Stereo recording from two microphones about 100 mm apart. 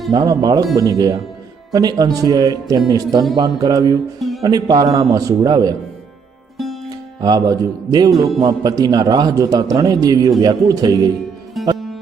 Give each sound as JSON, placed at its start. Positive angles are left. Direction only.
{"t": 0.1, "sound": "a man's voice", "side_deg": -45}
{"t": 4.2, "sound": "music", "side_deg": 0}
{"t": 4.4, "sound": "a man's voice", "side_deg": -40}
{"t": 7.2, "sound": "a man's voice", "side_deg": -40}
{"t": 11.6, "sound": "music", "side_deg": 0}